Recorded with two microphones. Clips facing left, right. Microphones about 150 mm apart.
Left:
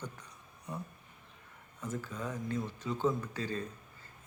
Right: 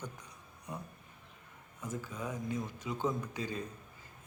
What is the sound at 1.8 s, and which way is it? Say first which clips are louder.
Speech: left 1 dB; 10° right (ahead or behind).